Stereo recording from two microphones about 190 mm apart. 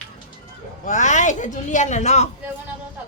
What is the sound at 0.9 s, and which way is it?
Speech, 40° left (ahead or behind).